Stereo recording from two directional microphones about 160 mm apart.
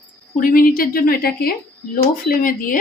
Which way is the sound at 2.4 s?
60° left (ahead or behind).